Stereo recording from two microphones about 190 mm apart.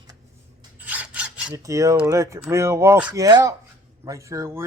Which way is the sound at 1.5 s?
15° right (ahead or behind).